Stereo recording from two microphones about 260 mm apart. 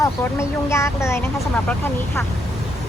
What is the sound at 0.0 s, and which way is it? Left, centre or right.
Speech, centre.